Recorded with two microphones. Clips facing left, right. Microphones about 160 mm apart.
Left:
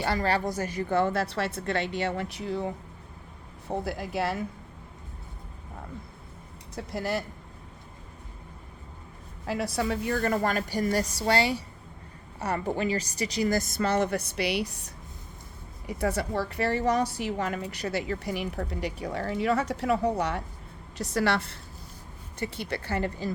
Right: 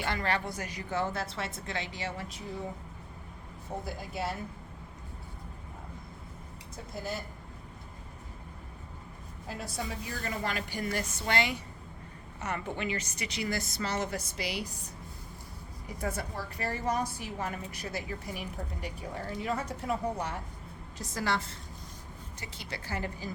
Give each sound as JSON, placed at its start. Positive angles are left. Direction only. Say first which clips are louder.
{"t": 0.0, "sound": "a woman's voice", "louder": "left 5 dB", "side_deg": 35}
{"t": 3.8, "sound": "a woman's voice", "louder": "left 6 dB", "side_deg": 75}
{"t": 6.7, "sound": "a woman's voice", "louder": "left 7 dB", "side_deg": 75}
{"t": 9.5, "sound": "a woman's voice", "louder": "left 9 dB", "side_deg": 75}
{"t": 15.9, "sound": "a woman's voice", "louder": "left 7 dB", "side_deg": 75}